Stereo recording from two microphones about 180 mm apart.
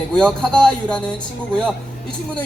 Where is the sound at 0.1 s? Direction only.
5° left (ahead or behind).